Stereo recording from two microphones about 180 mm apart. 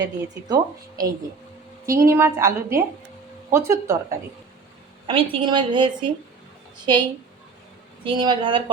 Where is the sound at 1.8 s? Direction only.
15° right (ahead or behind).